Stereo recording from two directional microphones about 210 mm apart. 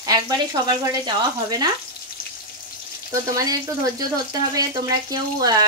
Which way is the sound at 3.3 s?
20° right (ahead or behind).